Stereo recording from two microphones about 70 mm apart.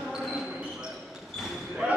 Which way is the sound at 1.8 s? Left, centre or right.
Centre.